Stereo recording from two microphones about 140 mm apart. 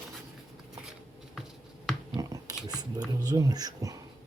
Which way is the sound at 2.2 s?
25° right (ahead or behind).